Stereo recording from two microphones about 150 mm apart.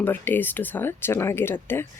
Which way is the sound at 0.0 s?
15° left (ahead or behind).